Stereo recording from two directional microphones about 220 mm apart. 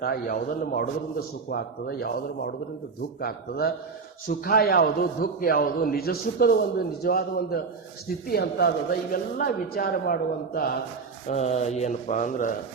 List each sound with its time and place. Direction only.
0.0 s a man's voice: 40° left (ahead or behind)
11.3 s speech: 30° left (ahead or behind)